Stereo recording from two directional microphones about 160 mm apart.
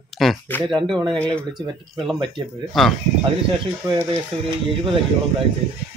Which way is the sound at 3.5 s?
25° right (ahead or behind).